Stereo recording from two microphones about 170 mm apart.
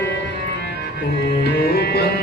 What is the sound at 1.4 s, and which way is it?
Music, 70° left (ahead or behind).